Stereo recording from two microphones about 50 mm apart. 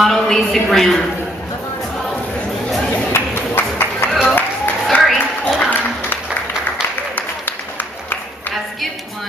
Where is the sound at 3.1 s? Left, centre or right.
Left.